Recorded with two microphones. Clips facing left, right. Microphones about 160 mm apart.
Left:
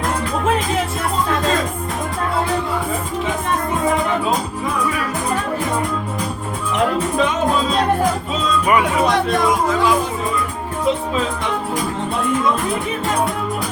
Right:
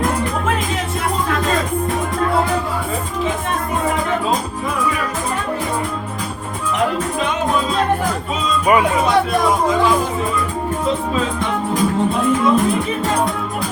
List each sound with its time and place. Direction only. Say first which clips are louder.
8.6 s music: right 3 dB; 25° right (ahead or behind)